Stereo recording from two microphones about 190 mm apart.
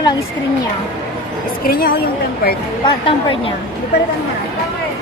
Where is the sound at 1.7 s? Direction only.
50° left (ahead or behind).